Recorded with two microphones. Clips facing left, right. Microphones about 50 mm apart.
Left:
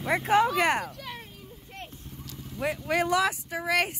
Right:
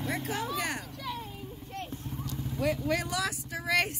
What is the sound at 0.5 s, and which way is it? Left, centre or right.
Speech, left.